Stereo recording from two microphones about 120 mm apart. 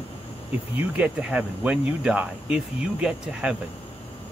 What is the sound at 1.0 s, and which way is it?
Speech, 10° right (ahead or behind).